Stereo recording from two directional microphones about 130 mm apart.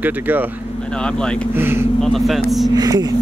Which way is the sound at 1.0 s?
5° left (ahead or behind).